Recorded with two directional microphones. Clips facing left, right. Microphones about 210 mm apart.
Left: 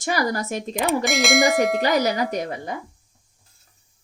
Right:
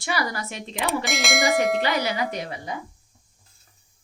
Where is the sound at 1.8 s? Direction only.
40° left (ahead or behind).